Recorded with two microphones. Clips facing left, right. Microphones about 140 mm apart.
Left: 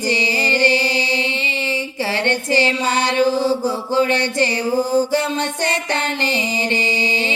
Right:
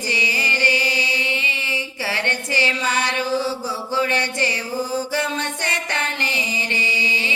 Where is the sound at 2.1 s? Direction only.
30° left (ahead or behind).